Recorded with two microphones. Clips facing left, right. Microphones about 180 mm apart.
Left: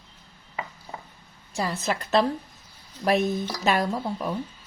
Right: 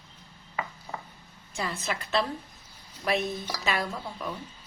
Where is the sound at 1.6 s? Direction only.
40° left (ahead or behind).